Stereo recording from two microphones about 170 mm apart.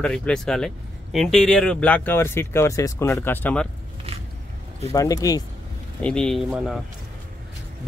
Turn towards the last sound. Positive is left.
turn(degrees=0)  # may be behind; listen again after turning